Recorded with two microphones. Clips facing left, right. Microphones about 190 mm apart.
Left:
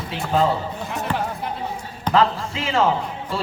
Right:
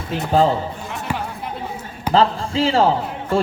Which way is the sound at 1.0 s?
Centre (ahead or behind).